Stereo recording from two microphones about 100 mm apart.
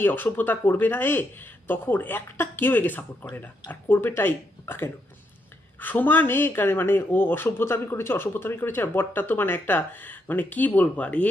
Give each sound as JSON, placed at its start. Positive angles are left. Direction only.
{"t": 0.0, "sound": "speech", "side_deg": 20}